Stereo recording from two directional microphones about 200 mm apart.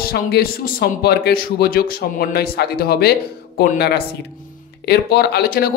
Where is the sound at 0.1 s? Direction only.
50° left (ahead or behind).